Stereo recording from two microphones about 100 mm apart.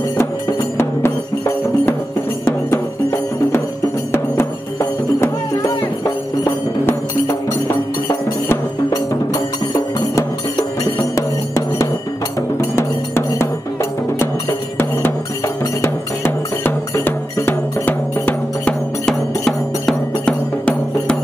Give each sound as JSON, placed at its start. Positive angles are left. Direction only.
{"t": 0.2, "sound": "music", "side_deg": 25}
{"t": 5.8, "sound": "music", "side_deg": 40}
{"t": 8.9, "sound": "music", "side_deg": 40}
{"t": 15.6, "sound": "cowbell", "side_deg": 25}
{"t": 19.4, "sound": "music", "side_deg": 5}